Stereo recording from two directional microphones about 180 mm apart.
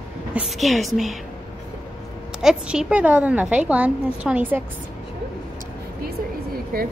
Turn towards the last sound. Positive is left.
turn(degrees=-60)  # may be behind; listen again after turning